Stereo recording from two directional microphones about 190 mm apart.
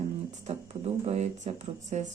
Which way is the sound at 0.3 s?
35° right (ahead or behind).